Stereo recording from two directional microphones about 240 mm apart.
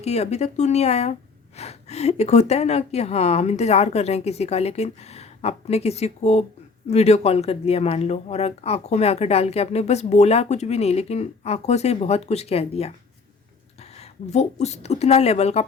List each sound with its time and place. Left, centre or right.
0.0 s speech: left